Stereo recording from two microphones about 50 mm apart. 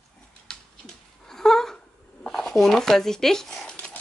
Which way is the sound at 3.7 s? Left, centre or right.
Left.